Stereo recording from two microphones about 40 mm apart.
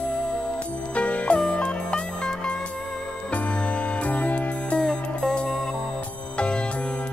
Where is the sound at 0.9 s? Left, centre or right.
Left.